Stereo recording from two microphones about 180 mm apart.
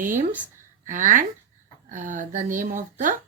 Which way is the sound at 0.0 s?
45° right (ahead or behind).